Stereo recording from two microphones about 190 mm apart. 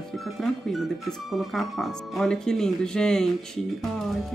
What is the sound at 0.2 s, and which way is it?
Speech, centre (ahead or behind).